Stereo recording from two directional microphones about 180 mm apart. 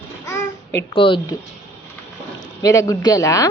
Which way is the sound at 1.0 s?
30° left (ahead or behind).